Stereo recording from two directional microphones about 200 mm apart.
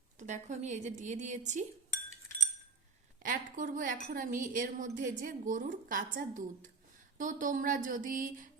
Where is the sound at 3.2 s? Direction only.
40° right (ahead or behind).